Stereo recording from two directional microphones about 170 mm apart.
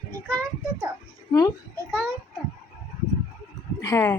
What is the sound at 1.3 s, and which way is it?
Speech, 20° left (ahead or behind).